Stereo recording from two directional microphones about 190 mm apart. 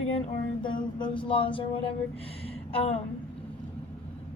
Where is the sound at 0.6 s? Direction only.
25° left (ahead or behind).